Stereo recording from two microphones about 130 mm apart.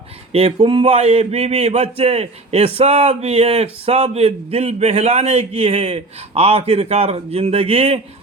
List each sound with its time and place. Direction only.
0.3 s speech: 45° right (ahead or behind)